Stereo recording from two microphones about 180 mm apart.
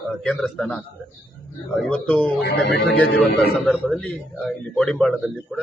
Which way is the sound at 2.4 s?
60° left (ahead or behind).